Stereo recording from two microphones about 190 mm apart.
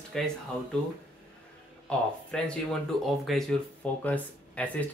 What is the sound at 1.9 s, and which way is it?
Speech, 5° left (ahead or behind).